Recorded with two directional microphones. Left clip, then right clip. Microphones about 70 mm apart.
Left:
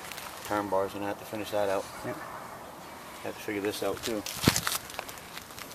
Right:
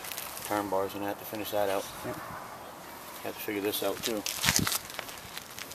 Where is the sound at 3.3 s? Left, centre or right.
Right.